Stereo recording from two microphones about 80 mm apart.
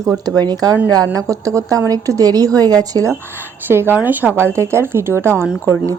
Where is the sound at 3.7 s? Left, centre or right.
Right.